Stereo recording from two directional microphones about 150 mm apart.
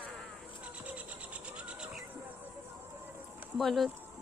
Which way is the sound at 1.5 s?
5° right (ahead or behind).